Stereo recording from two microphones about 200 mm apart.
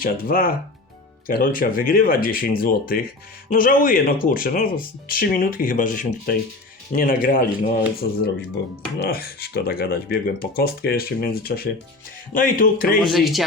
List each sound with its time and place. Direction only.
0.0 s speech: 45° left (ahead or behind)
8.0 s speech: 55° left (ahead or behind)
13.0 s speech: centre (ahead or behind)